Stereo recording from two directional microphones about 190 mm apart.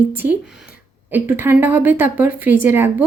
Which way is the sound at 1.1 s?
10° right (ahead or behind).